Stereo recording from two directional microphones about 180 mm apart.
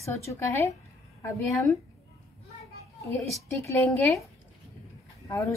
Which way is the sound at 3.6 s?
15° left (ahead or behind).